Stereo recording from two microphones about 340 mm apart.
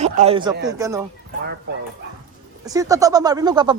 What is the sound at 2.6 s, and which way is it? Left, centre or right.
Speech, centre.